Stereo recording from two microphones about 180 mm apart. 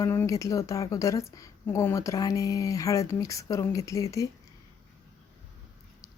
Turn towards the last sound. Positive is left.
turn(degrees=20)  # may be behind; listen again after turning